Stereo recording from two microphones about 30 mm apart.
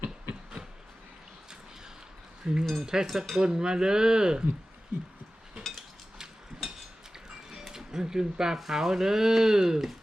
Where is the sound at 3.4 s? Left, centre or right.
Right.